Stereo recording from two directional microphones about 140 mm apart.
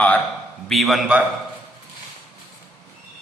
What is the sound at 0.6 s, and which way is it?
Speech, centre (ahead or behind).